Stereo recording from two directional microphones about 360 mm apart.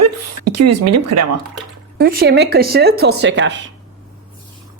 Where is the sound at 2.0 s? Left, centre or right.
Right.